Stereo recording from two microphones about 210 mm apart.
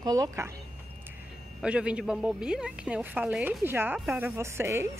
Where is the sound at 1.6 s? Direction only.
5° right (ahead or behind).